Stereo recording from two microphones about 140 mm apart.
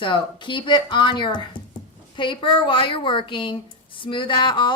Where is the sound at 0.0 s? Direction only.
35° left (ahead or behind).